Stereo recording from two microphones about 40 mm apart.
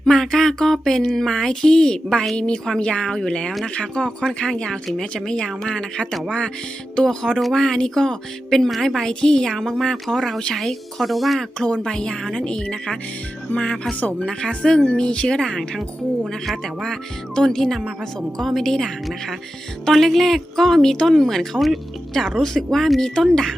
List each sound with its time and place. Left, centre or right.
0.0 s speech: centre
11.3 s speech: centre
12.2 s speech: centre
12.7 s speech: centre
14.3 s speech: centre